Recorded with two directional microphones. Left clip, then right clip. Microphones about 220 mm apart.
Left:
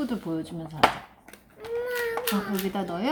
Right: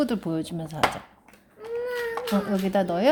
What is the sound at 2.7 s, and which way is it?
Speech, 45° right (ahead or behind).